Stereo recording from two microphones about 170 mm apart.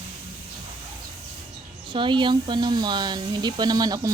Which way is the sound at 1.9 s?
30° right (ahead or behind).